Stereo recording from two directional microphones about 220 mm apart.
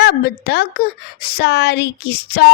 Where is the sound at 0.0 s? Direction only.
45° left (ahead or behind).